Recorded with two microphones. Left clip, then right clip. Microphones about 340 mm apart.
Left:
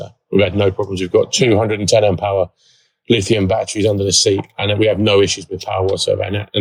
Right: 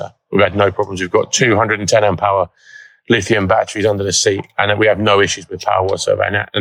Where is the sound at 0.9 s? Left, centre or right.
Centre.